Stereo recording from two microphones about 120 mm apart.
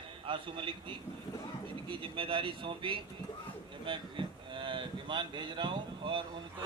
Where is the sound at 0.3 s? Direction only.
45° right (ahead or behind).